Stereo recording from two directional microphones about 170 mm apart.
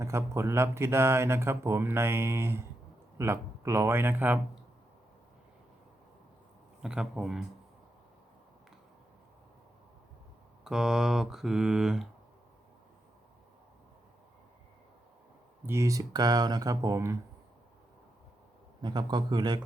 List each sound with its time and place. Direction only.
0.0 s speech: 15° right (ahead or behind)
6.8 s mantra: 5° right (ahead or behind)
10.6 s mantra: 5° right (ahead or behind)
15.6 s speech: 15° right (ahead or behind)
18.8 s speech: 25° right (ahead or behind)